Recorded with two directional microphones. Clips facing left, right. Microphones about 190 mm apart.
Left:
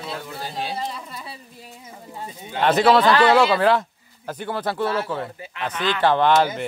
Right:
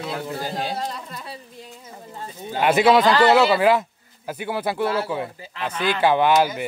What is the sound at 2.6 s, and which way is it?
A man's voice, 10° right (ahead or behind).